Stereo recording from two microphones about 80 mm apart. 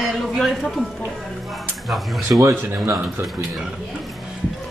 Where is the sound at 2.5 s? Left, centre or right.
Right.